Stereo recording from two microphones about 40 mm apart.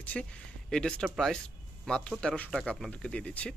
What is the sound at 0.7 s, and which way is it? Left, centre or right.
Speech, centre.